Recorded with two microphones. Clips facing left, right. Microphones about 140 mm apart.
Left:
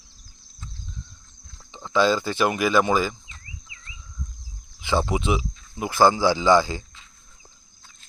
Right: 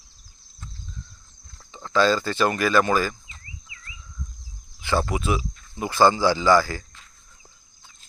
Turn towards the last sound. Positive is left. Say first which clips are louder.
# even
turn(degrees=20)  # may be behind; listen again after turning